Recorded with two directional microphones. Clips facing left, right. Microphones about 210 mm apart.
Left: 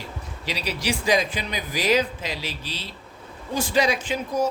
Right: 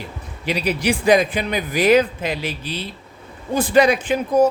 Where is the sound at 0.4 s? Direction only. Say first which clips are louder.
Right 7 dB; 55° right (ahead or behind).